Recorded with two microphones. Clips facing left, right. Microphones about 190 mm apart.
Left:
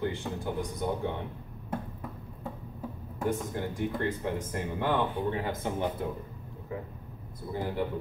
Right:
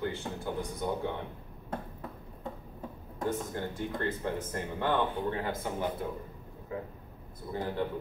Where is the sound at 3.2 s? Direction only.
15° left (ahead or behind).